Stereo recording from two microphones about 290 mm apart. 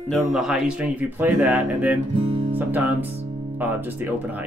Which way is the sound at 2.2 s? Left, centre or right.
Centre.